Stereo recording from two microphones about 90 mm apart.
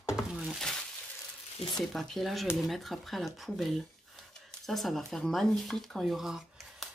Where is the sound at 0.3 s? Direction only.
10° right (ahead or behind).